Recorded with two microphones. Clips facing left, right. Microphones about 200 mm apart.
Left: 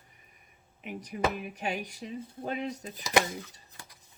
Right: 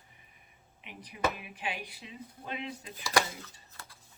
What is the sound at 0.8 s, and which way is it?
Speech, 45° left (ahead or behind).